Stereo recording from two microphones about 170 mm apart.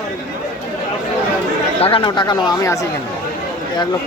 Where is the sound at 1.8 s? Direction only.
35° left (ahead or behind).